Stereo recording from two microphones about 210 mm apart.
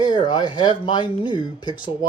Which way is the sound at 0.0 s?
20° left (ahead or behind).